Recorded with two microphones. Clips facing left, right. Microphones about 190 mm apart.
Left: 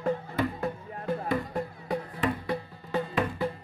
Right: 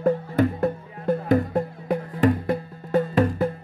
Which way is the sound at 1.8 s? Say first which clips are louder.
Right 9 dB; 50° right (ahead or behind).